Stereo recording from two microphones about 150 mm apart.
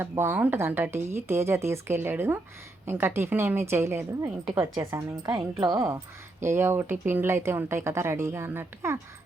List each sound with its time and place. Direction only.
0.0 s a woman's voice: 15° right (ahead or behind)